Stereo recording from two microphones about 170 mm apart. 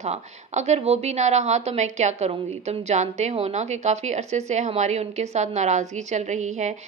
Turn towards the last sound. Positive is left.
turn(degrees=-45)  # may be behind; listen again after turning